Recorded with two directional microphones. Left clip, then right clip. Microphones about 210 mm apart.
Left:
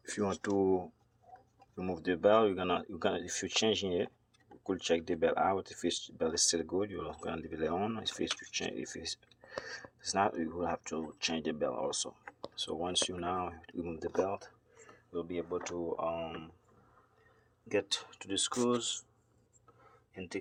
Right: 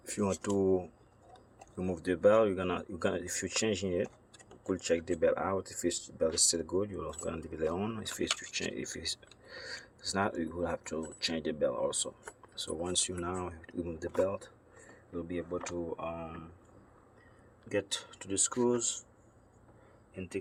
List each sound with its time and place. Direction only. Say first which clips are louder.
0.0 s speech: right 1 dB; centre (ahead or behind)
17.7 s speech: left 1 dB; 20° left (ahead or behind)
20.1 s speech: right 1 dB; 15° left (ahead or behind)